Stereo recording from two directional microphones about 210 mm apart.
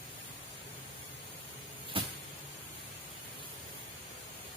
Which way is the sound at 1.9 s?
25° right (ahead or behind).